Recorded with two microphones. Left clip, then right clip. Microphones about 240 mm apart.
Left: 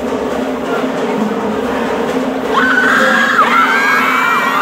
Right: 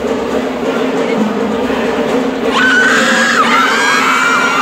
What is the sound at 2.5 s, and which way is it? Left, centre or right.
Screaming, left.